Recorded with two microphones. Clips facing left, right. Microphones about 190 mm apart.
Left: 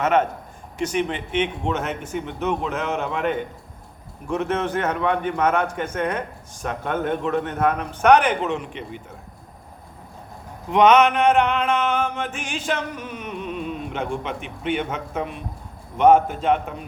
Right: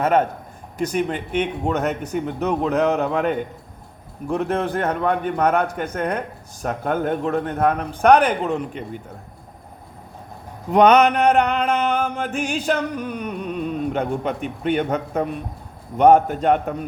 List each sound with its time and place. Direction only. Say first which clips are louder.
0.0 s a man's voice: right 2 dB; 40° right (ahead or behind)
10.7 s a man's voice: right 2 dB; 40° right (ahead or behind)